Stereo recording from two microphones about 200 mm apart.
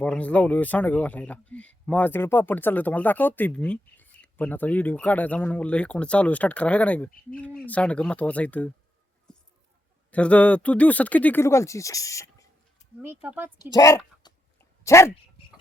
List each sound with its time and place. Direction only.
0.0 s speech: 5° left (ahead or behind)
10.1 s speech: 5° left (ahead or behind)
13.2 s a woman's voice: 10° right (ahead or behind)
13.6 s speech: 20° left (ahead or behind)